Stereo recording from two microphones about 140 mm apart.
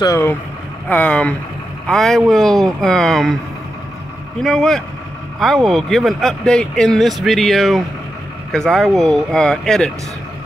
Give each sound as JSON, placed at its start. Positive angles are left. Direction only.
{"t": 0.0, "sound": "speech", "side_deg": 20}
{"t": 4.4, "sound": "speech", "side_deg": 0}